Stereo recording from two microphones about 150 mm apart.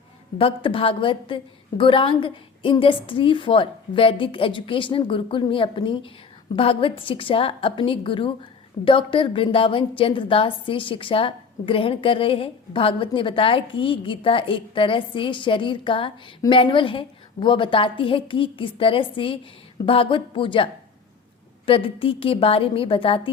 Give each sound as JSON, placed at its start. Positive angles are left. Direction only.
{"t": 0.3, "sound": "a woman's voice", "side_deg": 35}
{"t": 21.7, "sound": "a woman's voice", "side_deg": 35}